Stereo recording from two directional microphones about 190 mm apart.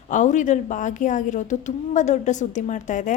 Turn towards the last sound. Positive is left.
turn(degrees=40)  # may be behind; listen again after turning